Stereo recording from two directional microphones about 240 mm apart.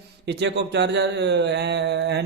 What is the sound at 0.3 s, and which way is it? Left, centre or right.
A man's voice, right.